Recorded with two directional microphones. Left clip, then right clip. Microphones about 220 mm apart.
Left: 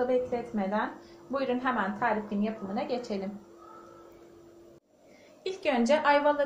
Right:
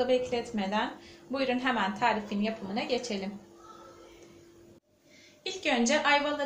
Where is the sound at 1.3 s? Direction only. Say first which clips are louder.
Even; 15° left (ahead or behind).